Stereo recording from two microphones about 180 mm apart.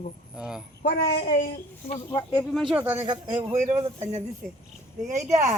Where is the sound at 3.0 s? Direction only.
35° right (ahead or behind).